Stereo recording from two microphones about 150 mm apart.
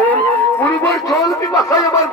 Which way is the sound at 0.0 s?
10° left (ahead or behind).